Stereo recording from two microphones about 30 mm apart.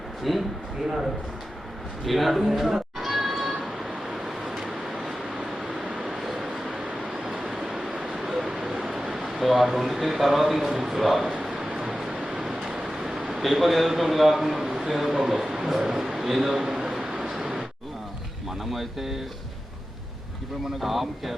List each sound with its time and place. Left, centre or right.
0.3 s a man's voice: centre
2.0 s cat: centre
4.0 s vehicle: centre
6.1 s vehicle: centre
7.7 s a sound: centre
8.6 s speech: centre
11.3 s bow-wow: right
11.8 s a sound: centre
15.2 s a man's voice: centre
16.0 s a sound: centre
18.7 s a man's voice: centre
20.8 s a man's voice: centre